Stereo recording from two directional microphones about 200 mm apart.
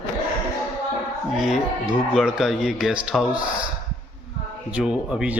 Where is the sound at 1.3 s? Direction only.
Centre (ahead or behind).